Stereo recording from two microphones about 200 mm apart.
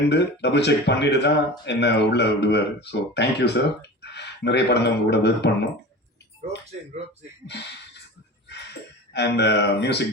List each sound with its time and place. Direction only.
0.1 s speech: 60° left (ahead or behind)
9.1 s speech: 60° left (ahead or behind)